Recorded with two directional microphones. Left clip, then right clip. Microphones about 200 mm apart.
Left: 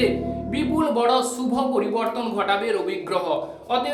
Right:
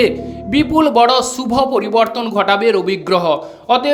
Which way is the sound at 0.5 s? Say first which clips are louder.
Right 11 dB; 45° right (ahead or behind).